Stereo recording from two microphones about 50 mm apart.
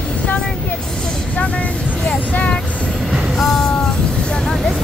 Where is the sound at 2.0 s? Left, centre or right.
Left.